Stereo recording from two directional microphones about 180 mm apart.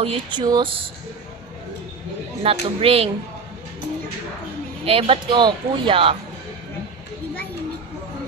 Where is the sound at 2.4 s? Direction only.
35° right (ahead or behind).